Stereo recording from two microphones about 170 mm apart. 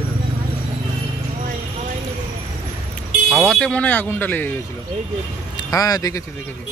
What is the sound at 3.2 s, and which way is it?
Speech, centre (ahead or behind).